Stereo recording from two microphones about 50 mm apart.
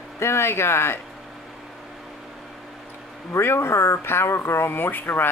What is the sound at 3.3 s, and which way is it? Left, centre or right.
Speech, left.